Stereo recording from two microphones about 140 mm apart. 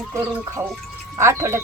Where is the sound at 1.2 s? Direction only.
20° right (ahead or behind).